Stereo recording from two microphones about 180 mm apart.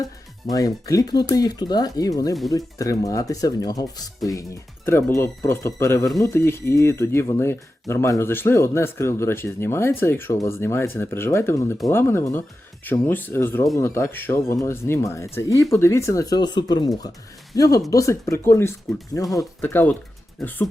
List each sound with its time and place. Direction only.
0.5 s speech: 20° left (ahead or behind)